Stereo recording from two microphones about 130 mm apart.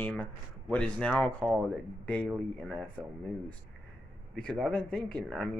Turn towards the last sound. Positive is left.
turn(degrees=5)  # may be behind; listen again after turning